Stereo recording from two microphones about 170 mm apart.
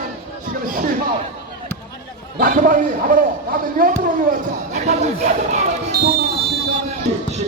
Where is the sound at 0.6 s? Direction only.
55° right (ahead or behind).